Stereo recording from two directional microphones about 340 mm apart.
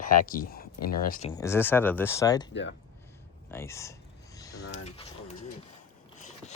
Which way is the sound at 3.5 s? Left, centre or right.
Centre.